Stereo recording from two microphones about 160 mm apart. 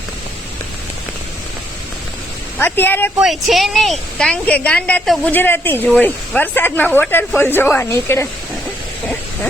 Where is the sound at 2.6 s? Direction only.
15° left (ahead or behind).